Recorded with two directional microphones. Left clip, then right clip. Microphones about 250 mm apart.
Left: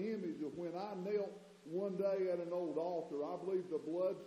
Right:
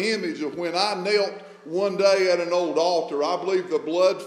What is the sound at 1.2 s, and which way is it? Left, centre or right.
Speech, right.